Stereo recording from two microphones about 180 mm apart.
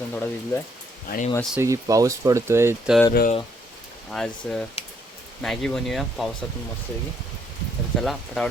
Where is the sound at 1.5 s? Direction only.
15° right (ahead or behind).